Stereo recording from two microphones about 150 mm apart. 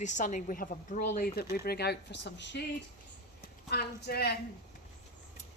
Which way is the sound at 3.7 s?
90° left.